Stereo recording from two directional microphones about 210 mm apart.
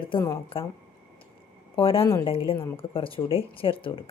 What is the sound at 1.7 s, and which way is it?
Speech, 25° left (ahead or behind).